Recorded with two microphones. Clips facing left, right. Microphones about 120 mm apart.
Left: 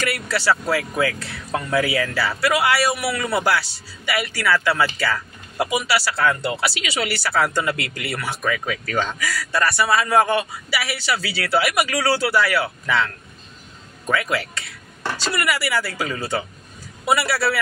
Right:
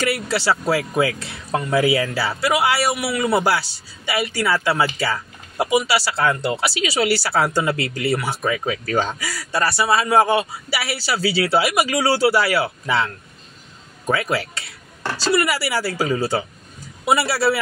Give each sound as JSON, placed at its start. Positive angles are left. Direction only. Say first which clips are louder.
{"t": 0.0, "sound": "a woman's voice", "louder": "right 2 dB", "side_deg": -30}